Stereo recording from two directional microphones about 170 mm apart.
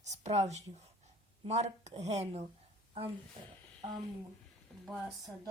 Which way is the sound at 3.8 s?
40° right (ahead or behind).